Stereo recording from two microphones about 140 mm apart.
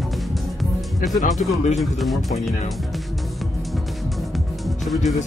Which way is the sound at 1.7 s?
Centre (ahead or behind).